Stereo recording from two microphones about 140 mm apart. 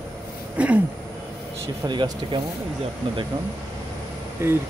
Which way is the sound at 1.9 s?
35° right (ahead or behind).